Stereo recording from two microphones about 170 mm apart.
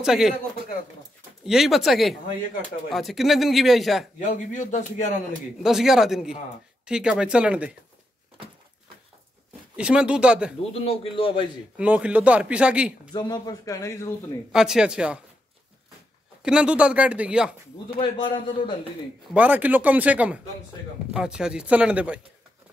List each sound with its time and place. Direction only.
0.0 s speech: centre (ahead or behind)
1.4 s speech: centre (ahead or behind)
4.2 s a man's voice: 50° left (ahead or behind)
5.6 s speech: centre (ahead or behind)
9.8 s speech: 5° right (ahead or behind)
10.6 s a man's voice: 35° left (ahead or behind)
11.7 s speech: 5° right (ahead or behind)
13.1 s speech: 25° left (ahead or behind)
14.5 s speech: 5° right (ahead or behind)
16.4 s speech: 5° right (ahead or behind)
17.9 s speech: 30° left (ahead or behind)
19.3 s speech: 10° right (ahead or behind)